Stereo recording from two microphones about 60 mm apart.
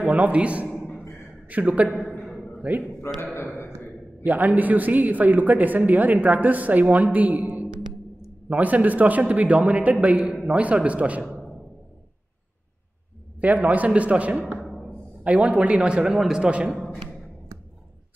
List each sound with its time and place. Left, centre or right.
0.0 s a man's voice: right
1.9 s a man's voice: centre
3.3 s a man's voice: left
4.2 s a woman's voice: right
13.4 s a woman's voice: right
14.6 s music: centre
15.2 s a woman's voice: right